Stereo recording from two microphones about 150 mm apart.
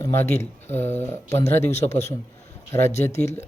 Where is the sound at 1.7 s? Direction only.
50° left (ahead or behind).